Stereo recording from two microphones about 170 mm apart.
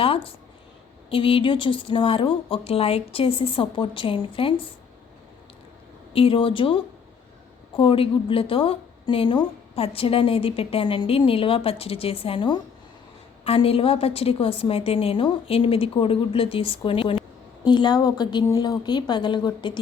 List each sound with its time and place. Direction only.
0.0 s a woman's voice: 35° left (ahead or behind)
6.1 s a woman's voice: 30° left (ahead or behind)